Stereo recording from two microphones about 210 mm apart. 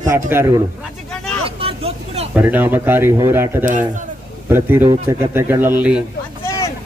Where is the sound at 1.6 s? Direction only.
25° right (ahead or behind).